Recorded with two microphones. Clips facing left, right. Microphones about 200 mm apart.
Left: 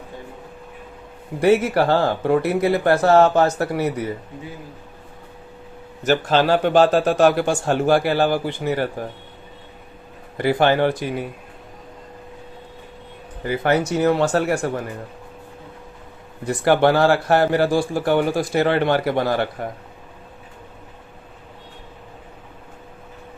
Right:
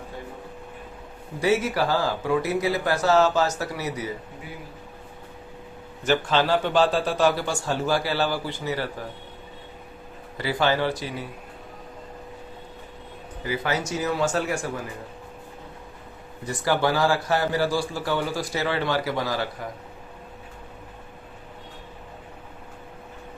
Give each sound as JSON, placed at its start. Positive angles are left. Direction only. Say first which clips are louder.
{"t": 1.4, "sound": "speech", "louder": "left 6 dB", "side_deg": 60}
{"t": 6.0, "sound": "a man's voice", "louder": "left 4 dB", "side_deg": 40}
{"t": 10.3, "sound": "speech", "louder": "left 6 dB", "side_deg": 55}
{"t": 13.4, "sound": "speech", "louder": "left 7 dB", "side_deg": 55}
{"t": 16.5, "sound": "speech", "louder": "left 7 dB", "side_deg": 65}